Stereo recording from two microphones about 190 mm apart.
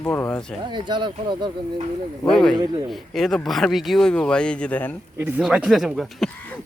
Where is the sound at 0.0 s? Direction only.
10° left (ahead or behind).